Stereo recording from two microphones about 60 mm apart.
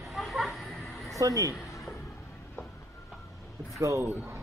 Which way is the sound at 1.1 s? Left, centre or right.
Right.